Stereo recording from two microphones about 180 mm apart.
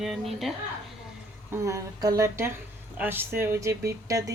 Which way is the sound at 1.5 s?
15° right (ahead or behind).